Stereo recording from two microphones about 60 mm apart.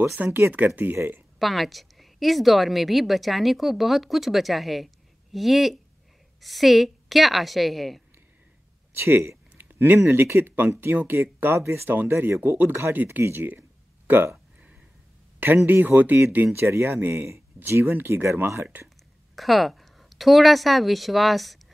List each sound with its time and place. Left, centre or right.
0.0 s speech: right
1.4 s a woman's voice: centre
8.9 s speech: right
9.6 s a sound: right
10.2 s speech: right
11.9 s speech: right
13.2 s a sound: right
15.4 s speech: right
19.3 s speech: centre